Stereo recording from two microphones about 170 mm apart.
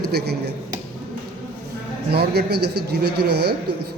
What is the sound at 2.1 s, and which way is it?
Music, 70° right (ahead or behind).